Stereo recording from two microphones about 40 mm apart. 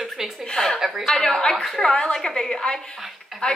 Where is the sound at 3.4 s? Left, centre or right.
Left.